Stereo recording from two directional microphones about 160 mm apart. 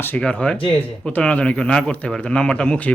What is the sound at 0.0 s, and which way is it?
Speech, 10° left (ahead or behind).